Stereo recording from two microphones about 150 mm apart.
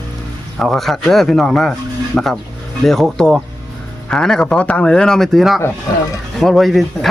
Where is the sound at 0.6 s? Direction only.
Centre (ahead or behind).